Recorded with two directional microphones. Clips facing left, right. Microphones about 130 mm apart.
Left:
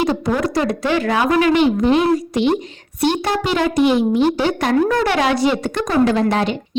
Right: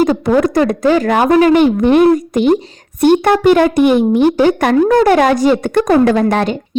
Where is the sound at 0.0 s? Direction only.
50° right (ahead or behind).